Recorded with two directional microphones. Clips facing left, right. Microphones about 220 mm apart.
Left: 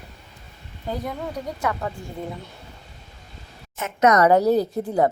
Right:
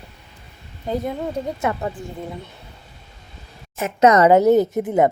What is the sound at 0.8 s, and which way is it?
Speech, 25° right (ahead or behind).